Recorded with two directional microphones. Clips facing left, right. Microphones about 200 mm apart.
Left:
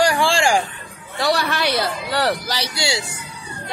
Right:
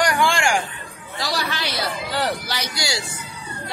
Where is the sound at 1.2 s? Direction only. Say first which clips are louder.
Left 6 dB; 65° left (ahead or behind).